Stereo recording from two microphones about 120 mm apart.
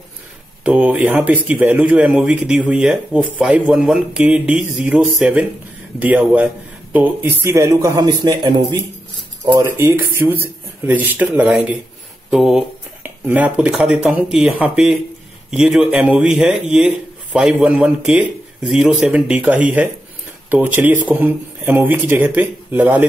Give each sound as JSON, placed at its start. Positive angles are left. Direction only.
{"t": 0.7, "sound": "speech", "side_deg": -10}
{"t": 7.4, "sound": "a man's voice", "side_deg": -25}
{"t": 13.0, "sound": "a man's voice", "side_deg": -15}